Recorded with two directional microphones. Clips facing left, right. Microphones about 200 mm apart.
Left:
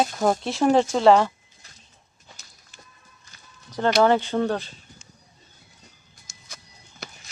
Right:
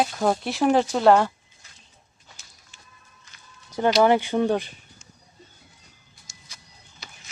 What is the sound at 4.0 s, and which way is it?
Speech, 15° right (ahead or behind).